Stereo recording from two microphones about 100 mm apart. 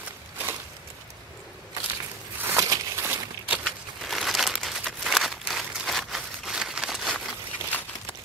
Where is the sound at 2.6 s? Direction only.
25° right (ahead or behind).